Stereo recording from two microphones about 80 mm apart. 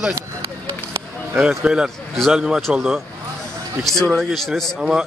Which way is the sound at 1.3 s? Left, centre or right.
Centre.